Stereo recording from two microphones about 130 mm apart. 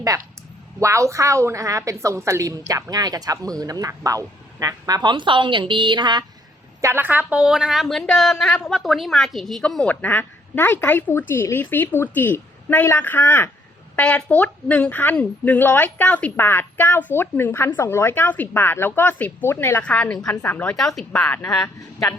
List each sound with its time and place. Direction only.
0.8 s a woman's voice: 25° right (ahead or behind)
6.8 s a woman's voice: 15° right (ahead or behind); by 20.3 s 5° left (ahead or behind)
20.3 s a woman's voice: 20° left (ahead or behind)
20.7 s a woman's voice: centre (ahead or behind)
21.8 s speech: 25° left (ahead or behind)